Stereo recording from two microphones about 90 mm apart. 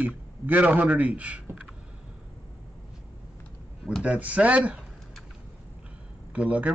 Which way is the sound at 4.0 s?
15° right (ahead or behind).